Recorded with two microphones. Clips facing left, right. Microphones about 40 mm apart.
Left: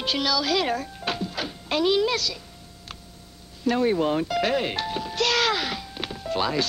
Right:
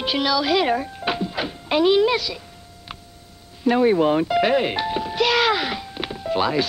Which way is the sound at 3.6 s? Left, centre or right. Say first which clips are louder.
Right 5 dB; centre.